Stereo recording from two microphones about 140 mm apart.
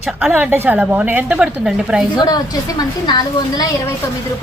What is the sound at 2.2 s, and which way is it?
A woman's voice, 30° left (ahead or behind).